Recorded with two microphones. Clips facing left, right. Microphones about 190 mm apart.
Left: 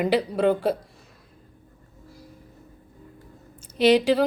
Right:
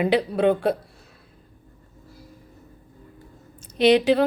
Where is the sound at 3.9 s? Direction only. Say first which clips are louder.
Right 2 dB; 65° right (ahead or behind).